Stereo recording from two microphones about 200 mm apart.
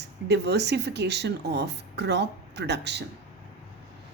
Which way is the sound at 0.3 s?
55° right (ahead or behind).